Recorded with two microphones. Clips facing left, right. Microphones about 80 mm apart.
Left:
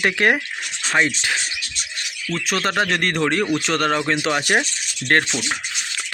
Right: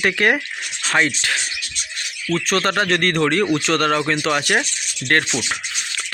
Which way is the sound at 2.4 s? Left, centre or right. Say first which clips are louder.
Right 1 dB; centre.